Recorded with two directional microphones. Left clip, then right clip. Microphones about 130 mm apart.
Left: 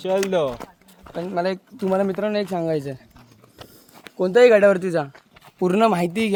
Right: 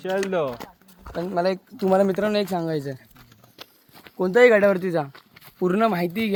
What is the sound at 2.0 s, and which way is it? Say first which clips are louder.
Speech: right 1 dB; 90° right.